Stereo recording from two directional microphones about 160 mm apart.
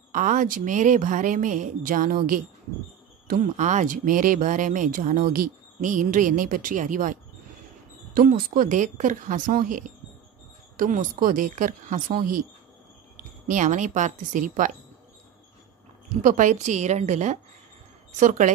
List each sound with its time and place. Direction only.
0.1 s speech: 55° right (ahead or behind)
3.3 s a woman's voice: 50° right (ahead or behind)
13.5 s a woman's voice: 50° right (ahead or behind)
16.2 s a woman's voice: 50° right (ahead or behind)